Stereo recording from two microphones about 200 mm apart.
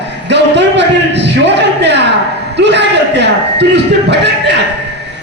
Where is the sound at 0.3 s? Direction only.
60° right (ahead or behind).